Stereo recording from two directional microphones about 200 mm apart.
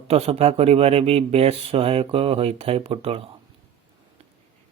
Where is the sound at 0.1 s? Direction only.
30° right (ahead or behind).